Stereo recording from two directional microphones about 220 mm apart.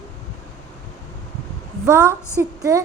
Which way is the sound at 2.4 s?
10° right (ahead or behind).